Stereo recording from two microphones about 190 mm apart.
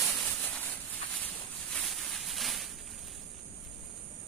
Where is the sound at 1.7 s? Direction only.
Centre (ahead or behind).